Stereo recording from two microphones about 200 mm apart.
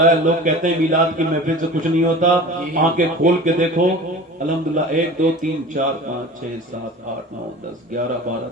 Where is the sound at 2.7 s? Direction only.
40° right (ahead or behind).